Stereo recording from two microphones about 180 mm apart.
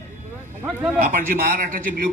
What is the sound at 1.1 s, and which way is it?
Speech, 50° right (ahead or behind).